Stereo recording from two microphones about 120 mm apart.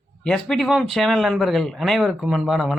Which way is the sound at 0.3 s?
5° left (ahead or behind).